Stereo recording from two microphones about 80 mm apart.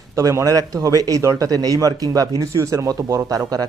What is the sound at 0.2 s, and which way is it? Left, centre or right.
Speech, right.